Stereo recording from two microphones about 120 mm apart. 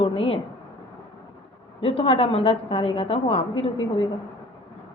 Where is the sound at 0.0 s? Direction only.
50° left (ahead or behind).